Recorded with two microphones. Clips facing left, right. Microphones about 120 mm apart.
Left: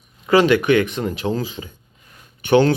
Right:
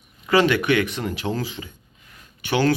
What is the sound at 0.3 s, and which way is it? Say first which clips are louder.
Speech: left 4 dB; 20° left (ahead or behind).